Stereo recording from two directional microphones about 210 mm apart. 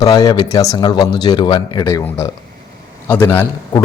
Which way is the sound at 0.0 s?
15° left (ahead or behind).